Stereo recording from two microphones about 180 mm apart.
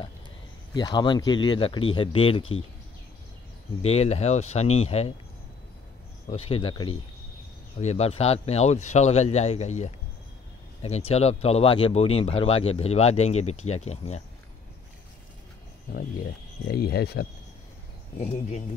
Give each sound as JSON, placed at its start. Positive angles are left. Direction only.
{"t": 0.7, "sound": "speech", "side_deg": 25}
{"t": 3.8, "sound": "speech", "side_deg": 35}
{"t": 6.2, "sound": "speech", "side_deg": 35}
{"t": 16.6, "sound": "speech", "side_deg": 65}
{"t": 18.1, "sound": "speech", "side_deg": 35}